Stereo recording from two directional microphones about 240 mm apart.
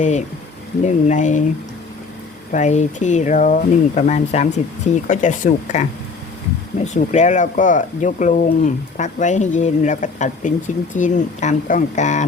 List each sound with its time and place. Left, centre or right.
0.0 s speech: left
2.5 s speech: left